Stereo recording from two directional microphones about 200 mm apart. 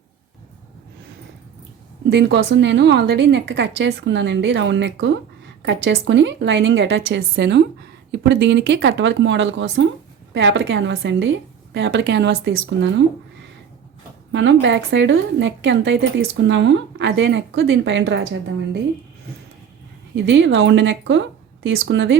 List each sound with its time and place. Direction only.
2.0 s a woman's voice: 60° right (ahead or behind)
14.3 s a woman's voice: 65° right (ahead or behind)
20.1 s a woman's voice: 65° right (ahead or behind)